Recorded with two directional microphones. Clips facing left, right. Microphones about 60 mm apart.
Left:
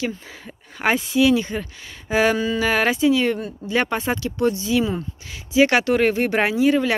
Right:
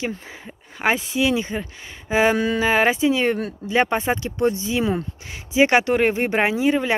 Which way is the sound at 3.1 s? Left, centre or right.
Right.